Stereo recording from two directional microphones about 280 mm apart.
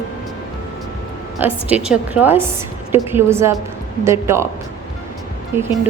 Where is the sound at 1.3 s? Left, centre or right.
Centre.